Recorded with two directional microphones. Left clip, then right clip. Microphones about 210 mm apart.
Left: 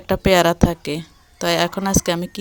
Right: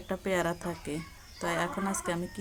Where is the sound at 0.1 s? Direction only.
45° left (ahead or behind).